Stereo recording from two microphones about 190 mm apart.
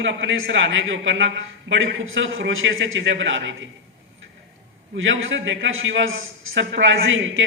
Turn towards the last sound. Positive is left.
turn(degrees=-90)